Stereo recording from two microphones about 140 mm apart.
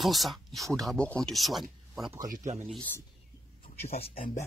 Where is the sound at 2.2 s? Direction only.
60° right (ahead or behind).